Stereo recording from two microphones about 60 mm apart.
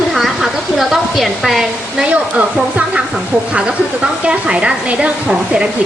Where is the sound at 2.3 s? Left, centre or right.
Right.